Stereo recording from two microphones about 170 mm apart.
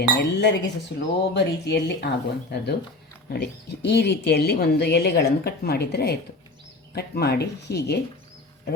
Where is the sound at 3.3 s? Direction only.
75° left (ahead or behind).